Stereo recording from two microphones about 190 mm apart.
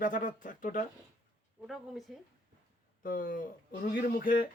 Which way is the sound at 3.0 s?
45° left (ahead or behind).